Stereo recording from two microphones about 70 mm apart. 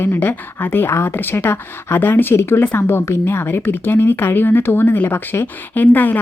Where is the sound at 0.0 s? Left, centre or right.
Left.